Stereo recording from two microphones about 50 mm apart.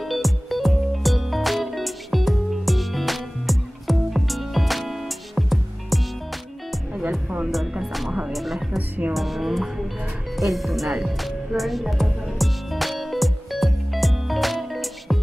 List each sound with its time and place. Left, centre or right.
0.0 s music: centre
7.8 s music: centre
8.7 s music: right
9.1 s music: centre
10.3 s speech: centre
11.1 s music: centre